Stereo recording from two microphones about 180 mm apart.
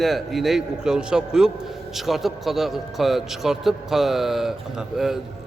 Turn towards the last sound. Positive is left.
turn(degrees=0)  # may be behind; listen again after turning